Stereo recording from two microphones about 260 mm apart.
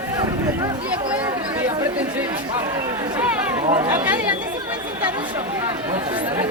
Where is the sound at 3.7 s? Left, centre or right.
Centre.